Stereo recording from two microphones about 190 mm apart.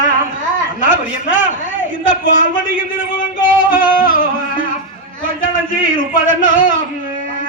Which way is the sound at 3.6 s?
45° left (ahead or behind).